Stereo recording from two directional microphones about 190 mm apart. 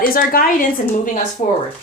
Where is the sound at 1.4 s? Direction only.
35° left (ahead or behind).